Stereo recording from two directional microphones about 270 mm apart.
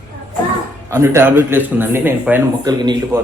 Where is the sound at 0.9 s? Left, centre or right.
Centre.